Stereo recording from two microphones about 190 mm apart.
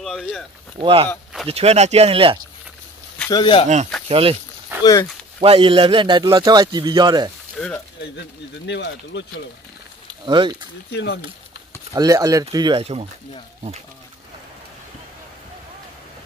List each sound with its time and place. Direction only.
0.0 s speech: centre (ahead or behind)
0.7 s a man's voice: 25° right (ahead or behind)
3.3 s speech: 25° left (ahead or behind)
3.6 s a man's voice: 40° right (ahead or behind)
5.4 s a man's voice: 30° right (ahead or behind)
7.5 s speech: centre (ahead or behind)
8.0 s speech: 65° left (ahead or behind)
10.2 s a man's voice: 25° right (ahead or behind)
10.9 s speech: 60° left (ahead or behind)
11.9 s a man's voice: 15° right (ahead or behind)